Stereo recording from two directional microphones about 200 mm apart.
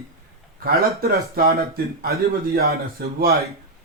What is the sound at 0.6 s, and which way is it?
Speech, 50° right (ahead or behind).